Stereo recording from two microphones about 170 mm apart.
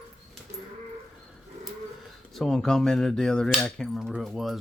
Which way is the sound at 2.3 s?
Centre (ahead or behind).